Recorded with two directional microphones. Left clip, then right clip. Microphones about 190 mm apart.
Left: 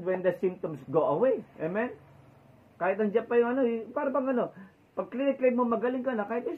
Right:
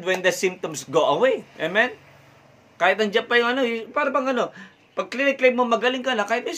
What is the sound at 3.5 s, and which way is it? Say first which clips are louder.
Speech: right 6 dB; 30° right (ahead or behind).